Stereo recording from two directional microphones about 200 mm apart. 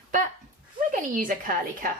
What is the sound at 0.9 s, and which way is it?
Speech, 40° right (ahead or behind).